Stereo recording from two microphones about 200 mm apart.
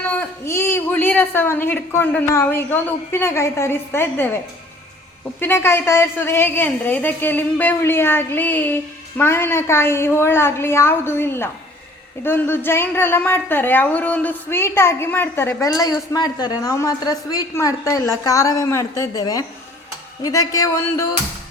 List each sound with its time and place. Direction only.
0.1 s a woman's voice: 10° left (ahead or behind)
5.4 s a woman's voice: 10° left (ahead or behind)
20.5 s a woman's voice: 15° left (ahead or behind)